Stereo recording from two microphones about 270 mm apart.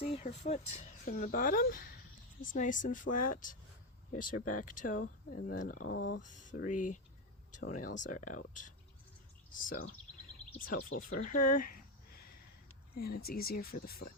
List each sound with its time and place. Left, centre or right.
0.0 s speech: left
5.9 s speech: left
6.2 s speech: left